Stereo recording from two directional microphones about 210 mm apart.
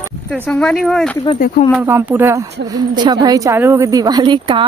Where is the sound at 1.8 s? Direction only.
10° right (ahead or behind).